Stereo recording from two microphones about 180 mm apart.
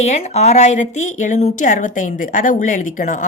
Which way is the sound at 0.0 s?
35° left (ahead or behind).